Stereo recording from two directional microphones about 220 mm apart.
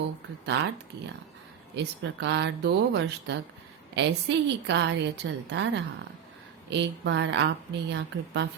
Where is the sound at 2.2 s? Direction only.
50° right (ahead or behind).